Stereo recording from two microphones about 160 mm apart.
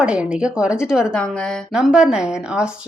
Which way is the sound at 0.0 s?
5° right (ahead or behind).